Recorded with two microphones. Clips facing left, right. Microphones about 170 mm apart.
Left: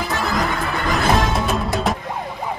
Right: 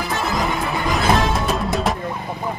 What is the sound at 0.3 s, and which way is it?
Music, centre (ahead or behind).